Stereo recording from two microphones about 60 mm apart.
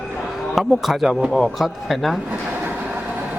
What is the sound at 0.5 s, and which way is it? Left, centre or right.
A man's voice, centre.